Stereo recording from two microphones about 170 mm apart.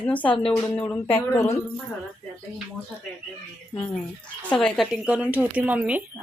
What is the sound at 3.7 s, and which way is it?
A woman's voice, 10° left (ahead or behind).